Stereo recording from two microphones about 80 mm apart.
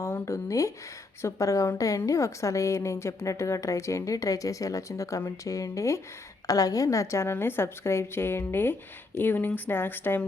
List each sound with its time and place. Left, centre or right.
0.0 s a woman's voice: left